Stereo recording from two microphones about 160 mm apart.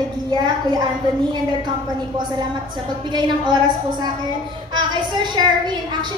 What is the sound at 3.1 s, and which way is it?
A woman's voice, 25° right (ahead or behind).